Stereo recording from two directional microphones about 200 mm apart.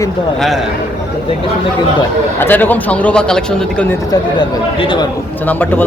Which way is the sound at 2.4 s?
10° left (ahead or behind).